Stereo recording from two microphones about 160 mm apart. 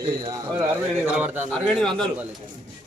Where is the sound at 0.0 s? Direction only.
25° right (ahead or behind).